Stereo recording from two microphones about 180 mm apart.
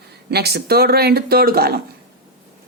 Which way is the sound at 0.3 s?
65° right (ahead or behind).